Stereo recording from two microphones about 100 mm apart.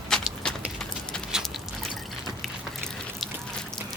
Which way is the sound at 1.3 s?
Centre (ahead or behind).